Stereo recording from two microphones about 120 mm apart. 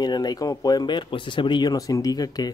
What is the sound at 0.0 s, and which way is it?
Speech, 35° left (ahead or behind).